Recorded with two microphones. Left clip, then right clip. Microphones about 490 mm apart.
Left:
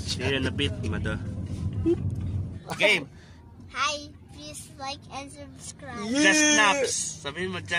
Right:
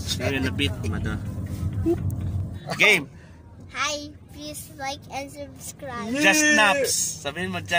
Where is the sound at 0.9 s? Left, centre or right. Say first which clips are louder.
Even; left.